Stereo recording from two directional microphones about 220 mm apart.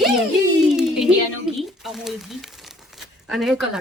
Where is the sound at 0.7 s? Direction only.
5° right (ahead or behind).